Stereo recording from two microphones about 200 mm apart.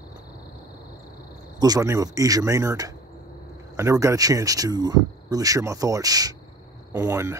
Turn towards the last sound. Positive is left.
turn(degrees=-15)  # may be behind; listen again after turning